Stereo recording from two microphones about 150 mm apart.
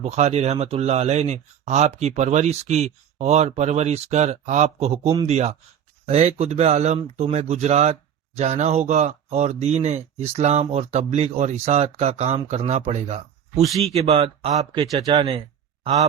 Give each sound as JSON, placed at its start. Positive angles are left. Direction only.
{"t": 0.0, "sound": "speech", "side_deg": -50}